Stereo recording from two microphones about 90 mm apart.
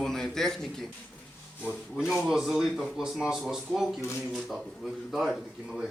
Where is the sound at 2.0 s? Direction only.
5° right (ahead or behind).